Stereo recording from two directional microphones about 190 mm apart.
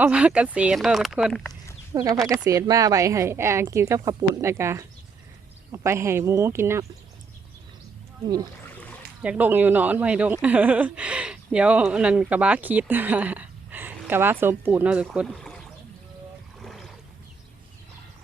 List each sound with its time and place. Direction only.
0.0 s speech: 5° right (ahead or behind)
2.3 s speech: 15° right (ahead or behind)
8.6 s a sound: 10° left (ahead or behind)
9.2 s speech: 10° right (ahead or behind)
15.3 s boat: 5° left (ahead or behind)
16.6 s a sound: centre (ahead or behind)